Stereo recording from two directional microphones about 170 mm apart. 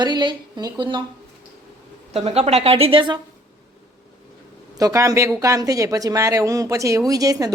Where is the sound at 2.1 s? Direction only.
35° right (ahead or behind).